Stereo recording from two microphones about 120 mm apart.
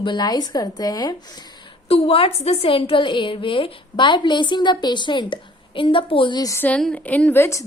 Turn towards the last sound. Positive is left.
turn(degrees=20)  # may be behind; listen again after turning